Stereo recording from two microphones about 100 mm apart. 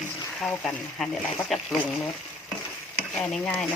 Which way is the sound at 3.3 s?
10° left (ahead or behind).